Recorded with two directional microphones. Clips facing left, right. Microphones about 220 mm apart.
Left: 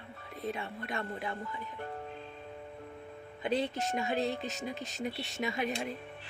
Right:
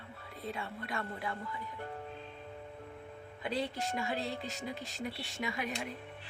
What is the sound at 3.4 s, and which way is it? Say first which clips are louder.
Speech: left 4 dB; 20° left (ahead or behind).